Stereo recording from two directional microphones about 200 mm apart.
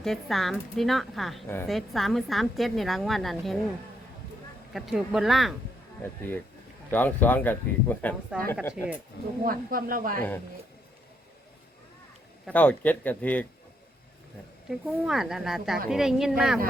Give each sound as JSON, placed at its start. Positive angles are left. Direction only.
{"t": 0.0, "sound": "a woman's voice", "side_deg": 0}
{"t": 4.7, "sound": "a woman's voice", "side_deg": 0}
{"t": 6.0, "sound": "speech", "side_deg": 10}
{"t": 8.3, "sound": "a woman's voice", "side_deg": -5}
{"t": 9.4, "sound": "speech", "side_deg": -45}
{"t": 12.5, "sound": "speech", "side_deg": 5}
{"t": 14.7, "sound": "a woman's voice", "side_deg": 0}